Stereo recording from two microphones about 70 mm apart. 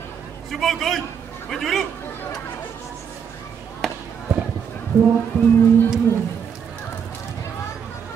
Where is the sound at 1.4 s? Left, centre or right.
Centre.